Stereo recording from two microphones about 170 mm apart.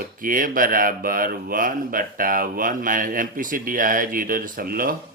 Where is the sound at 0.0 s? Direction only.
55° right (ahead or behind).